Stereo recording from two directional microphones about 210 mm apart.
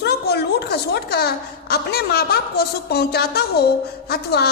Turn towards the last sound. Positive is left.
turn(degrees=50)  # may be behind; listen again after turning